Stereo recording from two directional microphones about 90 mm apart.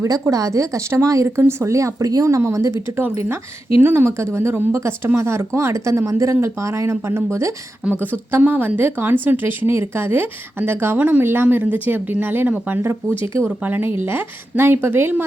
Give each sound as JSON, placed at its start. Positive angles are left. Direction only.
{"t": 0.0, "sound": "a woman's voice", "side_deg": -40}